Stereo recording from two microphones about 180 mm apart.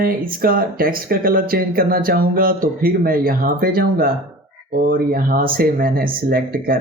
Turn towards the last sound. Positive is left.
turn(degrees=-55)  # may be behind; listen again after turning